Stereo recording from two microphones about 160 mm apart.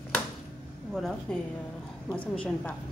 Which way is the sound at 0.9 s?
Centre (ahead or behind).